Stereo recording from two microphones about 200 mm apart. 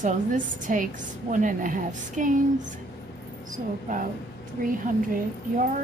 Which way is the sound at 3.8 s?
40° right (ahead or behind).